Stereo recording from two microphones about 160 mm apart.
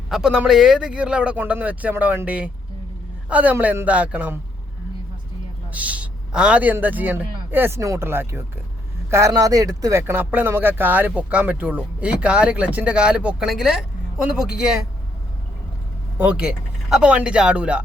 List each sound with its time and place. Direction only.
0.1 s speech: 5° right (ahead or behind)
5.7 s a man's voice: 10° right (ahead or behind)
16.1 s speech: 10° right (ahead or behind)